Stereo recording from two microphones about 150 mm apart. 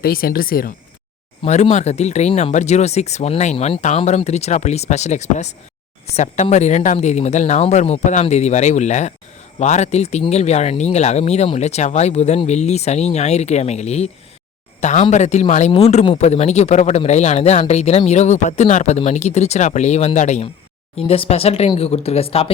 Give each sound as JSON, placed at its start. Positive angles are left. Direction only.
{"t": 0.0, "sound": "speech", "side_deg": 80}
{"t": 1.5, "sound": "speech", "side_deg": 50}
{"t": 21.1, "sound": "speech", "side_deg": 40}